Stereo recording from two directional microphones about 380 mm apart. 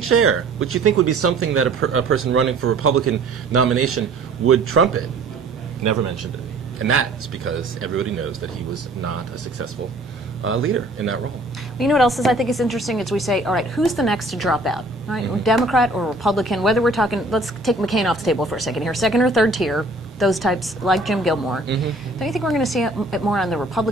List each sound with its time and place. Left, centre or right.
0.0 s speech: right
6.9 s speech: right
11.8 s a woman's voice: centre